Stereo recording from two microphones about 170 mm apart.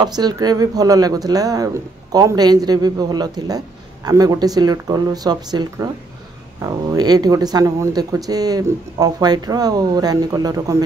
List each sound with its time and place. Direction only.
0.0 s speech: 25° right (ahead or behind)